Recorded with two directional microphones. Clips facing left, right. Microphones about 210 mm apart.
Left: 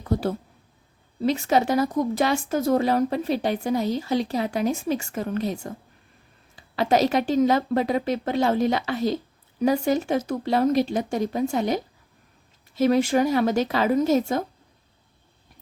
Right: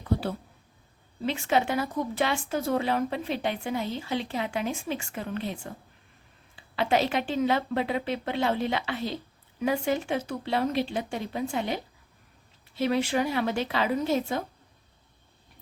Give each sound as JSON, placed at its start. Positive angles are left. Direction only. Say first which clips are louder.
{"t": 0.0, "sound": "speech", "louder": "left 4 dB", "side_deg": 45}